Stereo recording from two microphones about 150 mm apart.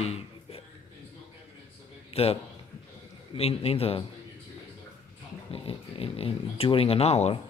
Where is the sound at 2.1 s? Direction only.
40° left (ahead or behind).